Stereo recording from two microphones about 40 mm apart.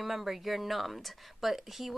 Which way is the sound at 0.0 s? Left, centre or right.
Centre.